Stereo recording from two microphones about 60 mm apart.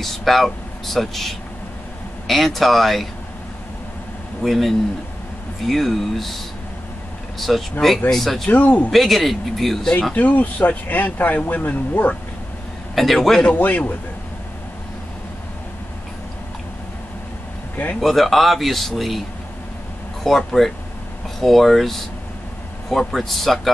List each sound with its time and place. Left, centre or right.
0.0 s speech: centre
4.4 s speech: centre
8.5 s speech: left
8.9 s speech: centre
10.1 s speech: left
12.9 s speech: centre
13.6 s speech: left
18.0 s speech: centre
20.2 s speech: centre